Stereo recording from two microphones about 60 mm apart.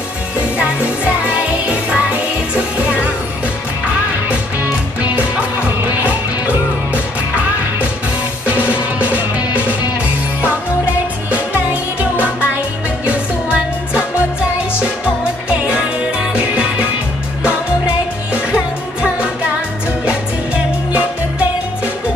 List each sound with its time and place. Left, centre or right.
0.6 s music: right
8.5 s music: right
11.2 s music: right